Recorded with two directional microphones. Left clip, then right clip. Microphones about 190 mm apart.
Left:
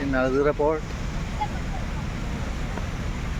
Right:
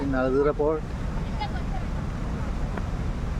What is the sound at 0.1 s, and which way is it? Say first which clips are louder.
Speech: left 1 dB; 5° left (ahead or behind).